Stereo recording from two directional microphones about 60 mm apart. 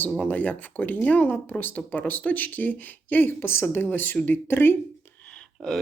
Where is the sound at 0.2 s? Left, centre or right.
Left.